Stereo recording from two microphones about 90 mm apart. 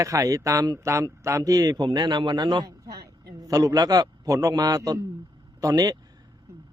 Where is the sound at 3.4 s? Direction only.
40° right (ahead or behind).